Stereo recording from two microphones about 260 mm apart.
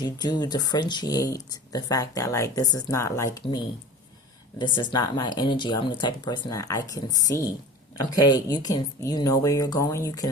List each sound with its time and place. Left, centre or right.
0.0 s speech: centre